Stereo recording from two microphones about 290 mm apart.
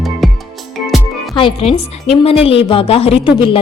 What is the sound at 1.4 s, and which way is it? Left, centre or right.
Speech, centre.